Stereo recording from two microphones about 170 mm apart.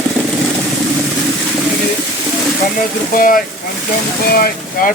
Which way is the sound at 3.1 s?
55° left (ahead or behind).